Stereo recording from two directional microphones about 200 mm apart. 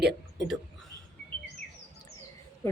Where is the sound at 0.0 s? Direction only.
Centre (ahead or behind).